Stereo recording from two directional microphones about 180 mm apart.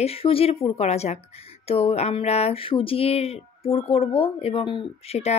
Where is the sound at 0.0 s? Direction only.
35° left (ahead or behind).